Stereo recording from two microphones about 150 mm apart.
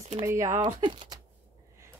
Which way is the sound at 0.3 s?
20° right (ahead or behind).